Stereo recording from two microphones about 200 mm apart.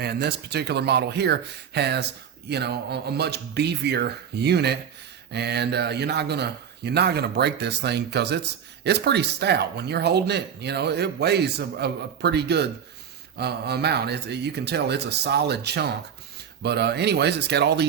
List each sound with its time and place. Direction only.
0.0 s speech: 55° right (ahead or behind)